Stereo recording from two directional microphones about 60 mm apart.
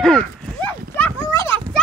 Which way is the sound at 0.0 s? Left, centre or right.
Centre.